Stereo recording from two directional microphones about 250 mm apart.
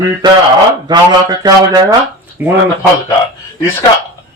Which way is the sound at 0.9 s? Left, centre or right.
Centre.